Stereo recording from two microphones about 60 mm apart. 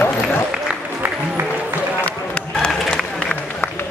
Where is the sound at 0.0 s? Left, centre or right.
Left.